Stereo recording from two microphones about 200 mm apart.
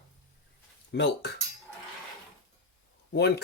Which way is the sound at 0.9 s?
60° left (ahead or behind).